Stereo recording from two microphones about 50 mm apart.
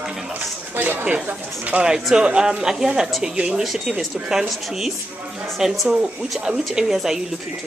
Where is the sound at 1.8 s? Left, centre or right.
Centre.